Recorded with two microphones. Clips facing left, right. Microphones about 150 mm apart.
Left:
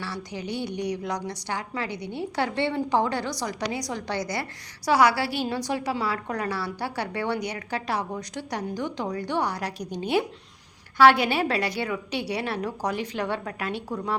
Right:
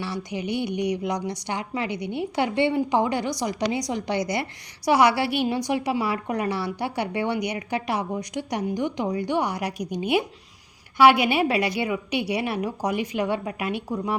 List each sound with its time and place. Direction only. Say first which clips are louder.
0.0 s a woman's voice: right 4 dB; 20° right (ahead or behind)